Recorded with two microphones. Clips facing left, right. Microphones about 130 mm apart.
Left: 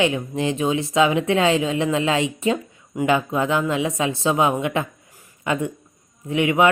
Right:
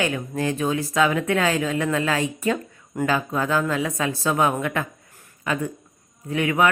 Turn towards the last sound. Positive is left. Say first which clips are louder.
# left 3 dB
turn(degrees=20)  # may be behind; listen again after turning